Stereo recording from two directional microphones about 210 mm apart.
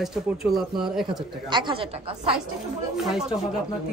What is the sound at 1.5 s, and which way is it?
Speech, 20° right (ahead or behind).